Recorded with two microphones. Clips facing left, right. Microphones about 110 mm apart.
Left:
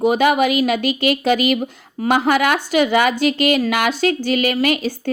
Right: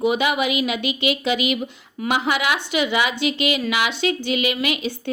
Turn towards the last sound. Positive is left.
turn(degrees=40)  # may be behind; listen again after turning